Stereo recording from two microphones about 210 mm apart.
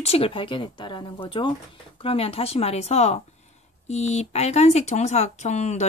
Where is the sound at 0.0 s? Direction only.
30° left (ahead or behind).